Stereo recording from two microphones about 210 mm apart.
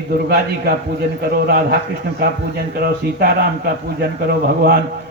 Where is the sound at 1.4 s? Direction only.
50° right (ahead or behind).